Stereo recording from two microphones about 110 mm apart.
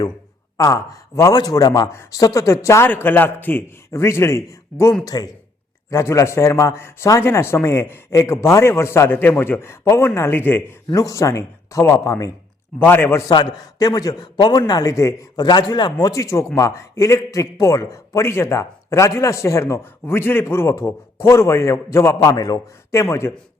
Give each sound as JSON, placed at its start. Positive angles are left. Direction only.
{"t": 0.5, "sound": "a man's voice", "side_deg": 30}
{"t": 10.9, "sound": "a man's voice", "side_deg": 30}
{"t": 13.3, "sound": "a man's voice", "side_deg": 40}
{"t": 15.4, "sound": "a man's voice", "side_deg": 40}